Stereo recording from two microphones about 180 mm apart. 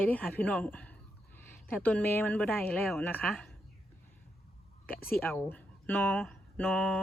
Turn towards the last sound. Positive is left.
turn(degrees=5)  # may be behind; listen again after turning